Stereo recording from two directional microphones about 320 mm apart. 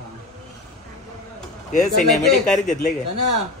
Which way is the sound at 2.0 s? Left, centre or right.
Centre.